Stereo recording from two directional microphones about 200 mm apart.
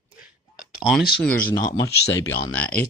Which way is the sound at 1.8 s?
55° left (ahead or behind).